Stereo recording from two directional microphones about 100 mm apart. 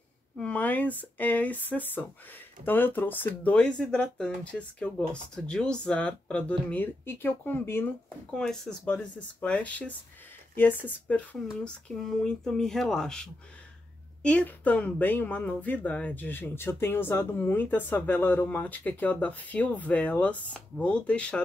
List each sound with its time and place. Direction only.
0.4 s speech: 15° left (ahead or behind)
8.4 s speech: 10° left (ahead or behind)
11.6 s speech: 5° left (ahead or behind)